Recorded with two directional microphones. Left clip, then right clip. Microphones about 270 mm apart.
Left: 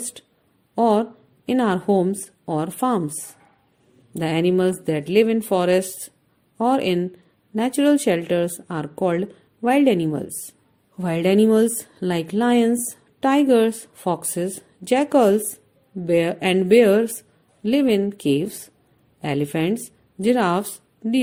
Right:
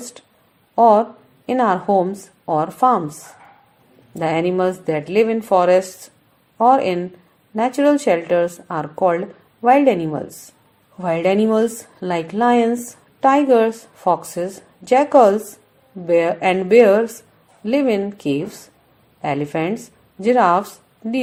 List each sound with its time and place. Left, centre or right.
0.8 s a woman's voice: left
4.1 s a woman's voice: left